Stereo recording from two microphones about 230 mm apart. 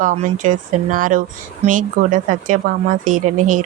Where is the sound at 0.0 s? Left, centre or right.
Right.